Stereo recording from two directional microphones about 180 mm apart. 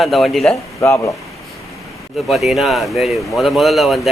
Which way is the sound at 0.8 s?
15° left (ahead or behind).